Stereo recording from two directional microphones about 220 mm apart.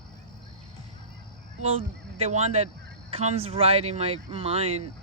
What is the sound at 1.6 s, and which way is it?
Speech, 25° right (ahead or behind).